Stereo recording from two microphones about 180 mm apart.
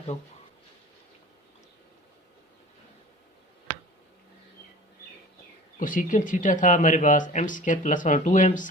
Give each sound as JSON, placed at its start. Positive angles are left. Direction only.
{"t": 5.8, "sound": "speech", "side_deg": 50}